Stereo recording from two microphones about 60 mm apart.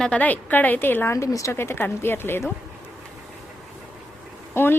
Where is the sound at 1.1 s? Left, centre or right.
Left.